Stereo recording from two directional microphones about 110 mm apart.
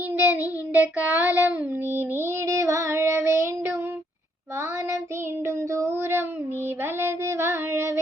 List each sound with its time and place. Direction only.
0.2 s child singing: 15° right (ahead or behind)
5.5 s child singing: 25° right (ahead or behind)